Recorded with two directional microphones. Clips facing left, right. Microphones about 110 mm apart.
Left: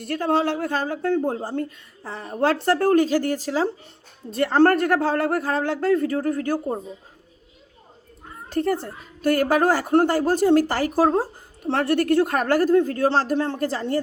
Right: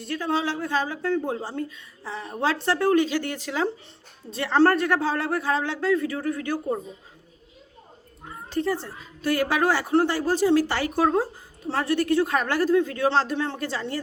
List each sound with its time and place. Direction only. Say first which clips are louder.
0.0 s a woman's voice: left 4 dB; 55° left (ahead or behind); by 3.7 s 35° left (ahead or behind)
4.3 s a woman's voice: left 3 dB; 50° left (ahead or behind)
8.4 s a woman's voice: left 3 dB; 55° left (ahead or behind); by 11.3 s 35° left (ahead or behind)
11.6 s a woman's voice: left 3 dB; 60° left (ahead or behind); by 14.0 s 45° left (ahead or behind)